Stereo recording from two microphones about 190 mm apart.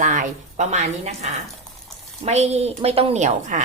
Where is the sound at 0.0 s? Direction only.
40° right (ahead or behind).